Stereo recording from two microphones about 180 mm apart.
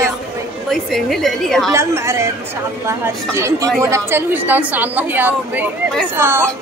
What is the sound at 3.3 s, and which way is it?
A woman's voice, 15° right (ahead or behind).